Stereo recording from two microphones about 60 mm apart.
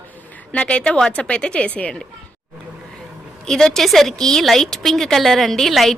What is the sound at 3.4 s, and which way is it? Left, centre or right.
A woman's voice, centre.